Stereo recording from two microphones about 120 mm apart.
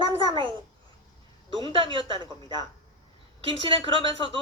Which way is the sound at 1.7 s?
45° right (ahead or behind).